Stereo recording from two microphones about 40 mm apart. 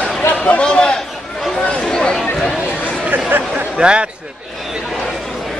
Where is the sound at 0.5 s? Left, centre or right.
Left.